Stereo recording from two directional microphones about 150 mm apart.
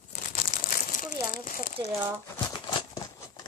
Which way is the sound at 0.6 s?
60° left (ahead or behind).